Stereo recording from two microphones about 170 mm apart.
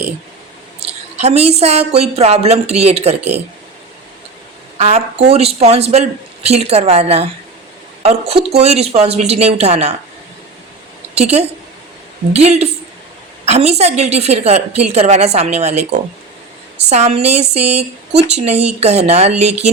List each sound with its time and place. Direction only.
1.2 s a woman's voice: 40° right (ahead or behind)
4.8 s a woman's voice: 40° right (ahead or behind)
11.1 s a woman's voice: 40° right (ahead or behind)